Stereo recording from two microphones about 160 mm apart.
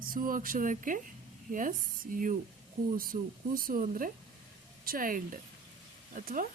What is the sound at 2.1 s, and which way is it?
A woman's voice, 60° right (ahead or behind).